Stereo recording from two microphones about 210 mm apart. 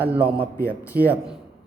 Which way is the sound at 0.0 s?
5° right (ahead or behind).